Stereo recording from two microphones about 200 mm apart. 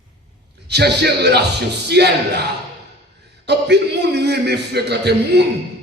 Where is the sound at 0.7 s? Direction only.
55° right (ahead or behind).